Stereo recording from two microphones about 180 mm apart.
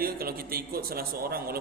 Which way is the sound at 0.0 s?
55° right (ahead or behind).